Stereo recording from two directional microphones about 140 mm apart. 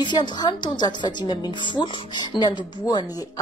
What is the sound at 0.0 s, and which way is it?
A woman's voice, 30° left (ahead or behind).